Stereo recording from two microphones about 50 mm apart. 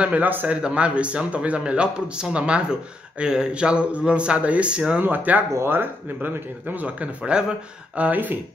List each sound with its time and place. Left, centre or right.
0.0 s speech: right
0.6 s a man's voice: centre
5.0 s speech: right
7.2 s speech: centre
8.0 s speech: right